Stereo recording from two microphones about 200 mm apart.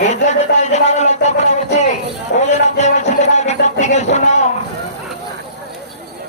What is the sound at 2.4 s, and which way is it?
Music, 35° left (ahead or behind).